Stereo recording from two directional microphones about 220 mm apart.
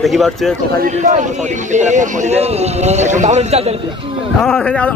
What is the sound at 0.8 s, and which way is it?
Speech, 35° right (ahead or behind).